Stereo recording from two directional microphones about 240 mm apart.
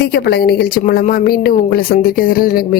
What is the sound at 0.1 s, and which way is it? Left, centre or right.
Speech, left.